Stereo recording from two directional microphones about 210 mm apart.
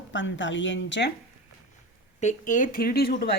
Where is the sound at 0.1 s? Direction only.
60° left (ahead or behind).